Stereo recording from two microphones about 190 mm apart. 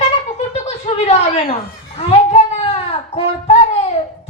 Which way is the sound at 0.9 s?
35° left (ahead or behind).